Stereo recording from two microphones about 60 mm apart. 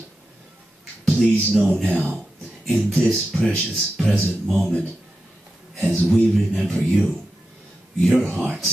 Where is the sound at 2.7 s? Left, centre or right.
Centre.